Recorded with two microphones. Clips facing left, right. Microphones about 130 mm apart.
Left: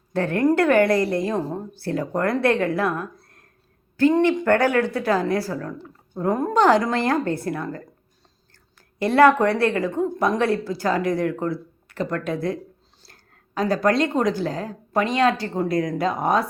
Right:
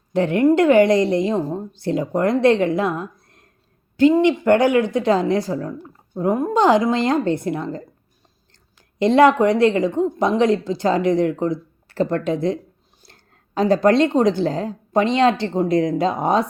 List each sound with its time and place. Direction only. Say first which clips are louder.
0.1 s a woman's voice: right 4 dB; 20° right (ahead or behind)
9.0 s a woman's voice: right 2 dB; 20° right (ahead or behind)
11.9 s a woman's voice: right 5 dB; 30° right (ahead or behind)